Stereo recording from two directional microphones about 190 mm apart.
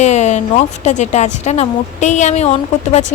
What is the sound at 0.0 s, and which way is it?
Speech, 35° left (ahead or behind).